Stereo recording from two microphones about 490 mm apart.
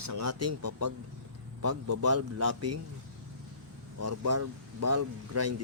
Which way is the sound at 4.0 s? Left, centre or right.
Right.